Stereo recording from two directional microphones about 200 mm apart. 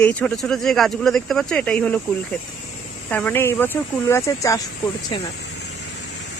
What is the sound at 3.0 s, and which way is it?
Speech, 10° left (ahead or behind).